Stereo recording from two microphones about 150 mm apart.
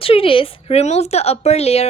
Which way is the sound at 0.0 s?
35° left (ahead or behind).